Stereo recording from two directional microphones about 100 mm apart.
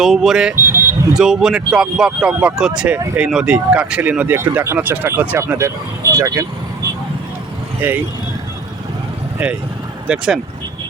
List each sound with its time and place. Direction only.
0.0 s speech: 5° right (ahead or behind)
0.5 s a sound: 25° right (ahead or behind)
1.1 s speech: 5° right (ahead or behind)
4.4 s speech: 25° right (ahead or behind)
7.8 s speech: 20° right (ahead or behind)
9.4 s speech: 10° right (ahead or behind)